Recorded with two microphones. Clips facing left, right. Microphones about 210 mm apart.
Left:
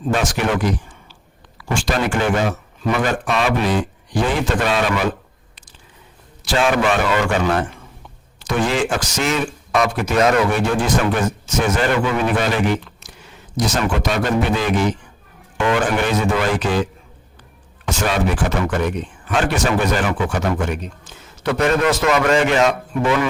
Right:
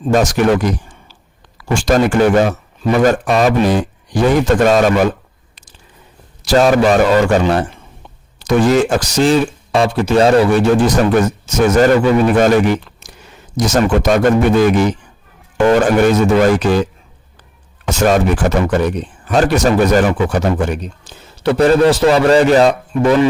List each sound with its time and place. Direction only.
0.0 s speech: 40° right (ahead or behind)
6.4 s speech: 40° right (ahead or behind)
13.7 s speech: 45° right (ahead or behind)
17.8 s speech: 45° right (ahead or behind)